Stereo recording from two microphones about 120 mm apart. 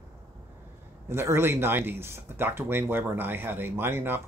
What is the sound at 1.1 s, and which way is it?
Speech, 20° right (ahead or behind).